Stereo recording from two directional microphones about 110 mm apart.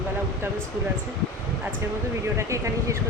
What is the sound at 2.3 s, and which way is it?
Speech, 30° right (ahead or behind).